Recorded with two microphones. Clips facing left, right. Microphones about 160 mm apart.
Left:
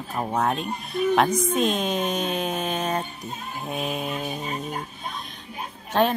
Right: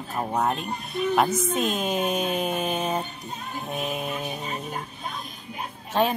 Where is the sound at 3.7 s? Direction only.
Centre (ahead or behind).